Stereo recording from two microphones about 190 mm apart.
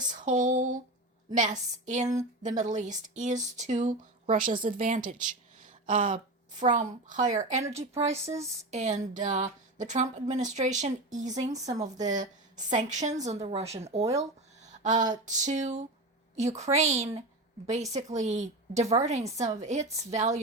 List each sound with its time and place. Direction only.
0.1 s a sound: 40° right (ahead or behind)
1.3 s a woman's voice: 40° right (ahead or behind)
8.2 s speech: 15° right (ahead or behind)
8.7 s a woman's voice: 40° right (ahead or behind)
14.2 s a sound: 40° right (ahead or behind)
15.3 s a woman's voice: 40° right (ahead or behind)